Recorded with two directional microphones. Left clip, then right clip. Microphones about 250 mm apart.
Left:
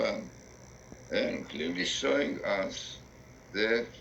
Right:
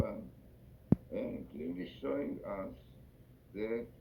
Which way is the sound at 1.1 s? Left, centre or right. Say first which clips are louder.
Left 9 dB; left.